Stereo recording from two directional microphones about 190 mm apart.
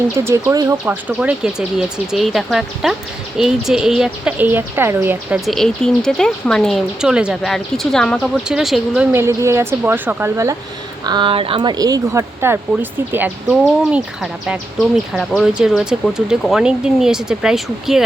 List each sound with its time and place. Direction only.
0.3 s a woman's voice: 15° right (ahead or behind)
5.5 s speech: centre (ahead or behind)
9.1 s a woman's voice: 15° right (ahead or behind)
11.0 s speech: 25° right (ahead or behind); by 18.0 s centre (ahead or behind)